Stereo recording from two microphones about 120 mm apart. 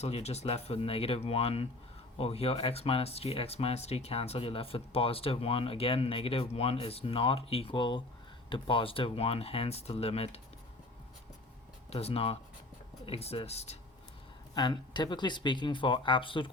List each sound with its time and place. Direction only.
0.0 s speech: 60° left (ahead or behind)
11.9 s speech: 55° left (ahead or behind)
14.5 s speech: 40° left (ahead or behind)